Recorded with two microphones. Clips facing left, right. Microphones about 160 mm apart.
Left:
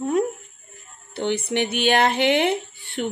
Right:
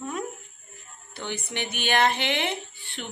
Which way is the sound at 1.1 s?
60° left (ahead or behind).